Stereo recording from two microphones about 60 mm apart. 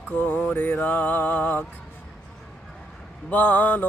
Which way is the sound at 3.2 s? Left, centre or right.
Left.